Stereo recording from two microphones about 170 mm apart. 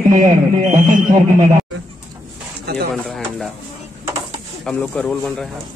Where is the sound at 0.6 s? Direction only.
50° right (ahead or behind).